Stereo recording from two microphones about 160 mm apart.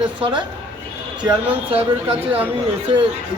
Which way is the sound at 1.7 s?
35° right (ahead or behind).